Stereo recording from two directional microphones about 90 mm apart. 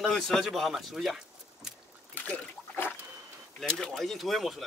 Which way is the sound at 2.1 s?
20° left (ahead or behind).